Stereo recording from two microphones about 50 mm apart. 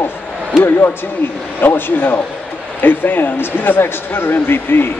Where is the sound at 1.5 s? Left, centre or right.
Left.